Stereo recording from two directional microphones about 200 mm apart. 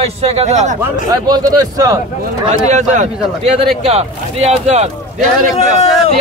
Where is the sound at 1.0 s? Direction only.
20° right (ahead or behind).